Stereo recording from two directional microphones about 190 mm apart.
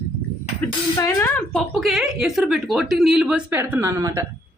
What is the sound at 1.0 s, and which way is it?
Speech, 15° left (ahead or behind).